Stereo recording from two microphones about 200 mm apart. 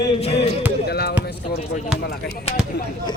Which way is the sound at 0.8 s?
55° left (ahead or behind).